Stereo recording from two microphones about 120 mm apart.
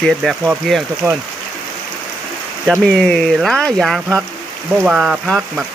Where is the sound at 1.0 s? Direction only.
25° right (ahead or behind).